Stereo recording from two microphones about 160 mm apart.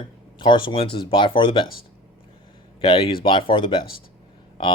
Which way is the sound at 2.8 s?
35° left (ahead or behind).